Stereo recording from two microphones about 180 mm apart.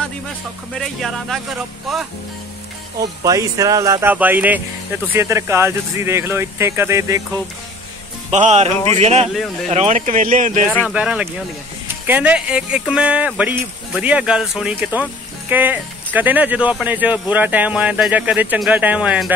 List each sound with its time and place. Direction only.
0.7 s speech: centre (ahead or behind)
3.0 s speech: 20° right (ahead or behind)
8.3 s speech: 40° right (ahead or behind)
10.9 s speech: 5° right (ahead or behind)